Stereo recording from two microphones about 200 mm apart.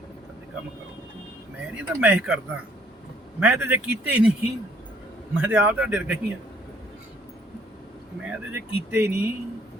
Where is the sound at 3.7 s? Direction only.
5° right (ahead or behind).